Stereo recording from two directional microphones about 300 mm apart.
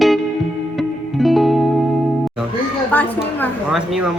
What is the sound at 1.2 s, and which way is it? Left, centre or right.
Music, centre.